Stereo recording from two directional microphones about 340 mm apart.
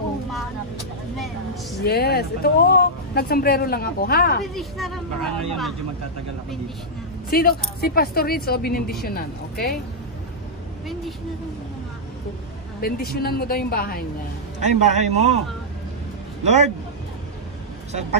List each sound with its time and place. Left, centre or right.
1.1 s a sound: centre
1.9 s speech: left
4.6 s speech: centre
7.2 s speech: left
12.8 s speech: left
14.6 s a man's voice: centre
16.4 s a man's voice: centre